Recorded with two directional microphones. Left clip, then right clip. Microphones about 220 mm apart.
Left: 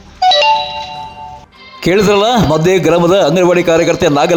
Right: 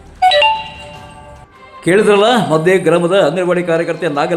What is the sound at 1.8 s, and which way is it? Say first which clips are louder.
A man's voice: even; 30° left (ahead or behind).